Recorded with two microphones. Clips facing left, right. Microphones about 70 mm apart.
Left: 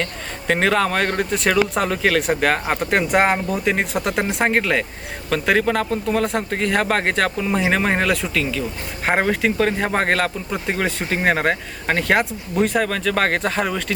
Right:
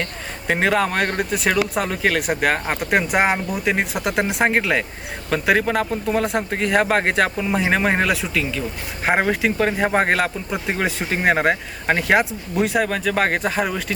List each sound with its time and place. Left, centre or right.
0.4 s speech: centre